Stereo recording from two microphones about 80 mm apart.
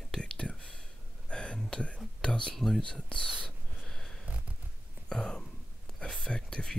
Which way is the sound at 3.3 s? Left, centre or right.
Centre.